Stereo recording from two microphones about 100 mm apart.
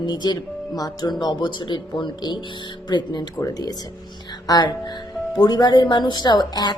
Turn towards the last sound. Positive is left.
turn(degrees=45)  # may be behind; listen again after turning